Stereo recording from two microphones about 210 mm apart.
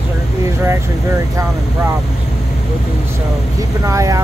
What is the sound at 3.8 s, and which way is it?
Speech, 15° right (ahead or behind).